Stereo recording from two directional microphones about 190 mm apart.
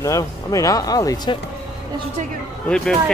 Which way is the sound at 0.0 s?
15° left (ahead or behind).